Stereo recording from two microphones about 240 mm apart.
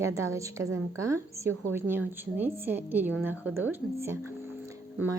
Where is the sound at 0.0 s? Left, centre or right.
Centre.